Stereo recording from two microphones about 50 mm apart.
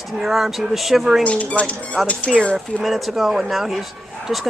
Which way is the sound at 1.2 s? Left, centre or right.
Left.